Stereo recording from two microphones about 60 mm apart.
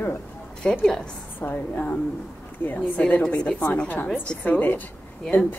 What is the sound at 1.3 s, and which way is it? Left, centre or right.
A woman's voice, left.